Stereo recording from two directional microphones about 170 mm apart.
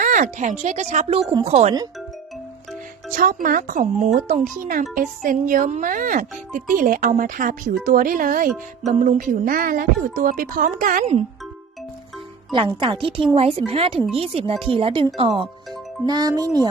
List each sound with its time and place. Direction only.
0.0 s speech: 50° right (ahead or behind)
3.2 s speech: 55° right (ahead or behind)
12.5 s speech: 25° right (ahead or behind)
16.0 s speech: 20° right (ahead or behind)